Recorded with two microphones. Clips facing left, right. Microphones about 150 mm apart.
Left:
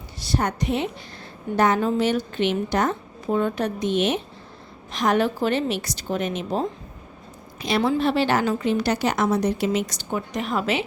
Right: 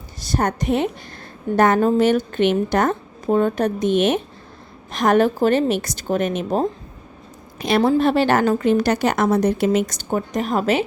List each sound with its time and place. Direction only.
0.2 s a woman's voice: 45° right (ahead or behind)